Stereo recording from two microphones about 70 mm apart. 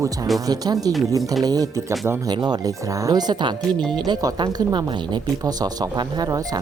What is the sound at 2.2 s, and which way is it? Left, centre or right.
Speech, right.